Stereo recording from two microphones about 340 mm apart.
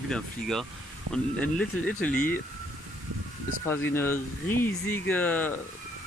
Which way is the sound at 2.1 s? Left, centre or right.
Left.